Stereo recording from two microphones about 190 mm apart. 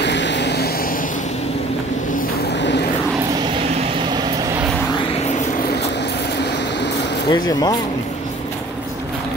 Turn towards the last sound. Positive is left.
turn(degrees=20)  # may be behind; listen again after turning